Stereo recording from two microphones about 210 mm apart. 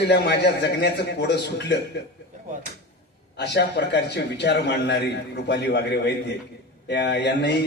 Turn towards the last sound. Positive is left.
turn(degrees=55)  # may be behind; listen again after turning